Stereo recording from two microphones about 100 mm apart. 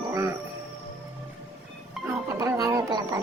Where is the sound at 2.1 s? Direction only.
30° right (ahead or behind).